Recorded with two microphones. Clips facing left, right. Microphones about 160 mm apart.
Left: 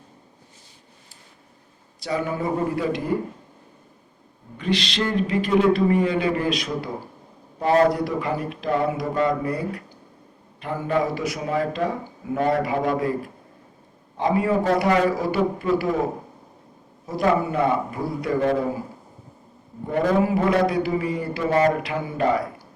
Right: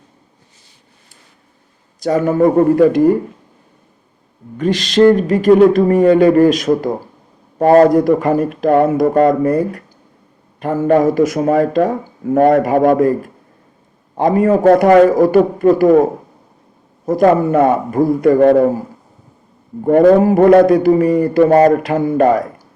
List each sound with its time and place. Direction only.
2.0 s a man's voice: 45° right (ahead or behind)
4.5 s a man's voice: 45° right (ahead or behind)
17.1 s a man's voice: 50° right (ahead or behind)
19.8 s a man's voice: 55° right (ahead or behind)